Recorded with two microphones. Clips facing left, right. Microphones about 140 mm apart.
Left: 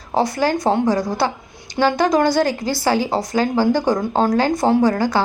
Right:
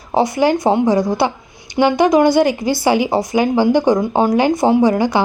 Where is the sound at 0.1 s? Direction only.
15° right (ahead or behind).